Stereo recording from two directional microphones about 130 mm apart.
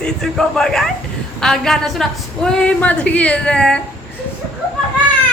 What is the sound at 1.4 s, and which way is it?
A woman's voice, 5° left (ahead or behind).